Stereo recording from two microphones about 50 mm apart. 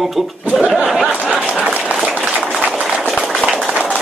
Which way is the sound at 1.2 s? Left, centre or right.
Right.